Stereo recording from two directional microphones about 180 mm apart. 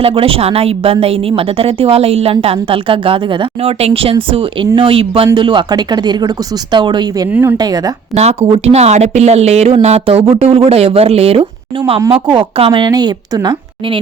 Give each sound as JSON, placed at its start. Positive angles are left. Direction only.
{"t": 0.0, "sound": "a woman's voice", "side_deg": -30}
{"t": 8.1, "sound": "a woman's voice", "side_deg": -35}